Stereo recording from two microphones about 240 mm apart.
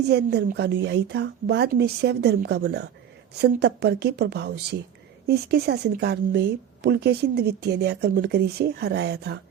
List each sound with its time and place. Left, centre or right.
0.0 s speech: right